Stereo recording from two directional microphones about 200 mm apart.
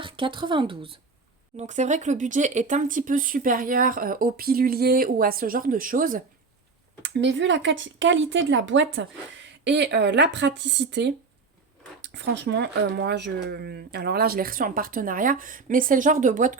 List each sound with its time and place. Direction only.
0.0 s speech: 25° right (ahead or behind)
1.5 s speech: 35° right (ahead or behind)
7.0 s speech: 60° right (ahead or behind); by 16.6 s 40° right (ahead or behind)